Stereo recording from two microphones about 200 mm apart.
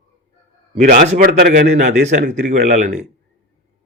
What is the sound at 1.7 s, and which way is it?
Speech, 35° right (ahead or behind).